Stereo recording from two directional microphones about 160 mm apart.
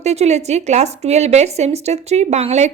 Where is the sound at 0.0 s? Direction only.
45° right (ahead or behind).